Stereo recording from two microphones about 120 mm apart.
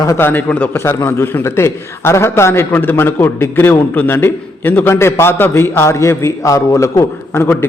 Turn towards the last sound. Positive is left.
turn(degrees=20)  # may be behind; listen again after turning